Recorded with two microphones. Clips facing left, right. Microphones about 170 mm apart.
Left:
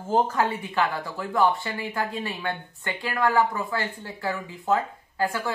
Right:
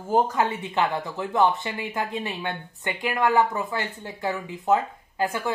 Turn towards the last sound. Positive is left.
turn(degrees=-20)  # may be behind; listen again after turning